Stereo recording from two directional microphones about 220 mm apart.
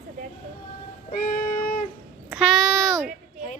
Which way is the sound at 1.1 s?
40° left (ahead or behind).